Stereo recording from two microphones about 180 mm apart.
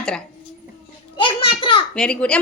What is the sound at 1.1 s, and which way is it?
Speech, 30° left (ahead or behind).